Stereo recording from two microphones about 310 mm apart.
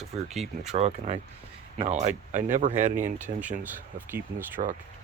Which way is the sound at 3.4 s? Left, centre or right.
Centre.